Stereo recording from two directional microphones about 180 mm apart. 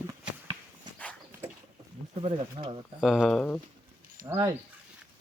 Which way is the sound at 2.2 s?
30° right (ahead or behind).